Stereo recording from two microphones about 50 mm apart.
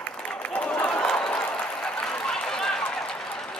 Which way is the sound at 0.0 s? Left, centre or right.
Left.